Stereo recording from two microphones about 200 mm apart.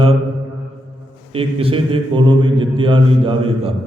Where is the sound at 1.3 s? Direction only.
30° right (ahead or behind).